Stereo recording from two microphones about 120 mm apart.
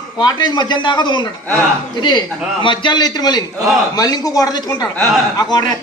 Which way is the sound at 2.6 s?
40° left (ahead or behind).